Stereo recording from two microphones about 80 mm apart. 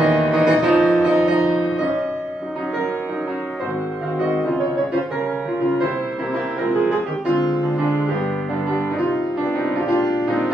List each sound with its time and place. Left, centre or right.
0.0 s music: centre
9.9 s music: left